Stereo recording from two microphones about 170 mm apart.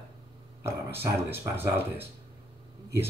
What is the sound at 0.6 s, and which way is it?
Speech, 15° right (ahead or behind).